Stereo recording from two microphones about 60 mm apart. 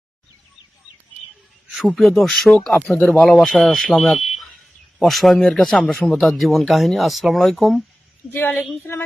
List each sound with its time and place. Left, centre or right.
1.9 s speech: centre
8.3 s a woman's voice: left